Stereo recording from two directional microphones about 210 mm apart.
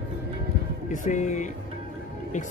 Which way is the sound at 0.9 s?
35° left (ahead or behind).